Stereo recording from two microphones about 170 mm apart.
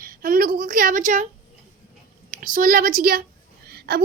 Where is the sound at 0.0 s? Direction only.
55° right (ahead or behind).